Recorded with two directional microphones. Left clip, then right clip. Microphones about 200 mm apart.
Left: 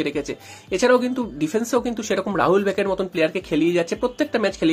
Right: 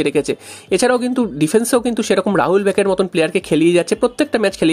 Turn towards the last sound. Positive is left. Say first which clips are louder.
# right 5 dB
turn(degrees=-45)  # may be behind; listen again after turning